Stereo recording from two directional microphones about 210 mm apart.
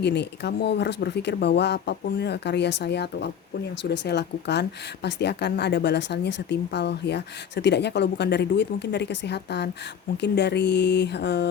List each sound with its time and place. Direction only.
0.0 s speech: 55° left (ahead or behind)